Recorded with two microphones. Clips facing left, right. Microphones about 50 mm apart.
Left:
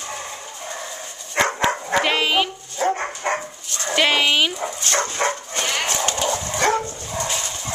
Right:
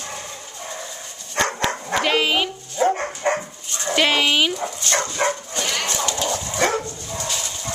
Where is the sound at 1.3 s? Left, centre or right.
Centre.